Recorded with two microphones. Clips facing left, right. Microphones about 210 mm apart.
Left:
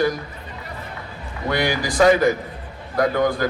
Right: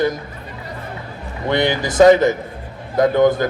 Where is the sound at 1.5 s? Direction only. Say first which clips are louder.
Right 4 dB; 25° right (ahead or behind).